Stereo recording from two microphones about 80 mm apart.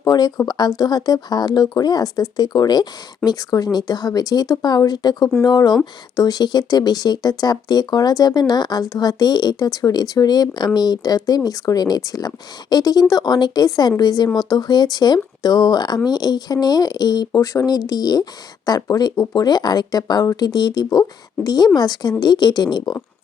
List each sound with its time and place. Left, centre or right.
0.0 s a woman's voice: left
22.2 s speech: left